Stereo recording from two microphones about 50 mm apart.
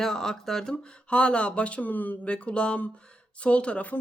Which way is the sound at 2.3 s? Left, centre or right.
Left.